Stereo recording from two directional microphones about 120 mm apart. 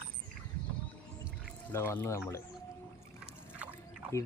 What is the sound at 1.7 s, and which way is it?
Speech, 20° left (ahead or behind).